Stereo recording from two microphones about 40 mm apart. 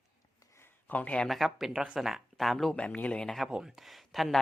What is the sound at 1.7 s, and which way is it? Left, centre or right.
Speech, right.